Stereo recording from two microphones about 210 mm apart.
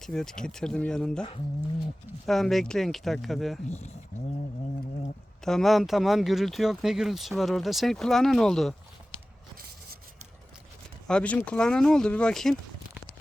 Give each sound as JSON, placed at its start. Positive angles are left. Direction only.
{"t": 0.0, "sound": "speech", "side_deg": 0}
{"t": 2.2, "sound": "speech", "side_deg": 0}
{"t": 3.7, "sound": "speech", "side_deg": 30}
{"t": 5.5, "sound": "speech", "side_deg": 0}
{"t": 11.1, "sound": "speech", "side_deg": 5}